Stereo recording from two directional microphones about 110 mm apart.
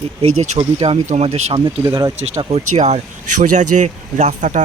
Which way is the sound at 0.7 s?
80° right.